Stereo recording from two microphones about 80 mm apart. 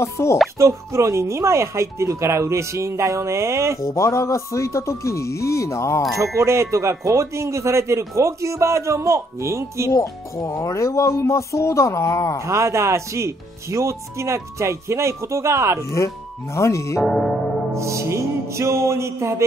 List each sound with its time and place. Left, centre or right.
0.0 s speech: left
0.6 s speech: right
3.8 s speech: left
6.3 s speech: right
9.8 s speech: left
12.4 s speech: right
16.5 s speech: left
17.0 s music: centre
17.7 s speech: right